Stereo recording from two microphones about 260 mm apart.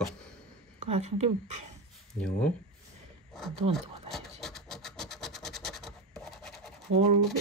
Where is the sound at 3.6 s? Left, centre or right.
Right.